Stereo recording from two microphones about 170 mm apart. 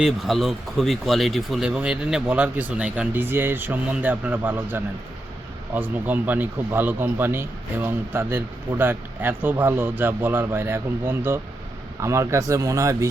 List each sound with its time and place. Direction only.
0.0 s speech: centre (ahead or behind); by 13.1 s 20° right (ahead or behind)